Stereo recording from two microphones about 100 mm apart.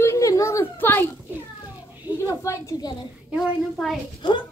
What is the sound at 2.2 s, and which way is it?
Speech, 30° left (ahead or behind).